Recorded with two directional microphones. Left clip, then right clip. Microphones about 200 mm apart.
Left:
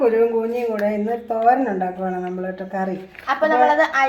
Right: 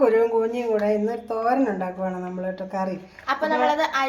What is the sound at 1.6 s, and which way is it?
Speech, 25° right (ahead or behind).